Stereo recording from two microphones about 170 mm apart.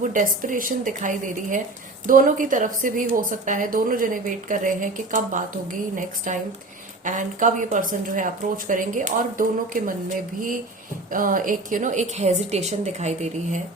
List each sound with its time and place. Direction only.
0.0 s a woman's voice: 50° right (ahead or behind)